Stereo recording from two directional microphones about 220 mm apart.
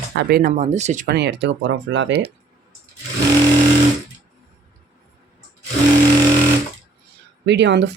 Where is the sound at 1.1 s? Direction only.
50° right (ahead or behind).